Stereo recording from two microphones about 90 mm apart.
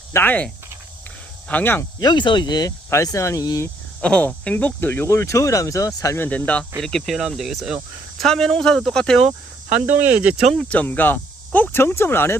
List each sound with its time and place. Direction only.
0.1 s speech: 25° left (ahead or behind)
1.5 s speech: 20° left (ahead or behind)
2.0 s speech: 55° left (ahead or behind)
2.9 s speech: 35° left (ahead or behind)
4.0 s speech: 10° left (ahead or behind); by 6.1 s 35° left (ahead or behind)
6.1 s speech: 20° left (ahead or behind)
6.8 s speech: 5° left (ahead or behind)
9.8 s speech: 15° right (ahead or behind)
10.5 s speech: 5° left (ahead or behind)
10.8 s speech: 20° left (ahead or behind)